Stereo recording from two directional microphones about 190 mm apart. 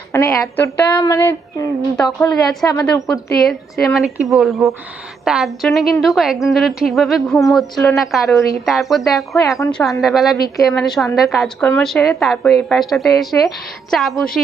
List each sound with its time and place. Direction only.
0.1 s a woman's voice: 15° left (ahead or behind)
2.0 s a woman's voice: 5° left (ahead or behind)
3.8 s a woman's voice: centre (ahead or behind)
9.6 s a woman's voice: 15° left (ahead or behind)
10.0 s a woman's voice: centre (ahead or behind)